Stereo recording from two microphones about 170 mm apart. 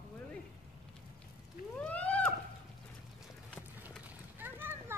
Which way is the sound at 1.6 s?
55° left (ahead or behind).